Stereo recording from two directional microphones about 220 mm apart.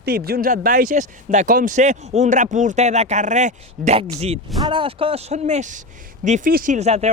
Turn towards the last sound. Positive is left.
turn(degrees=-30)  # may be behind; listen again after turning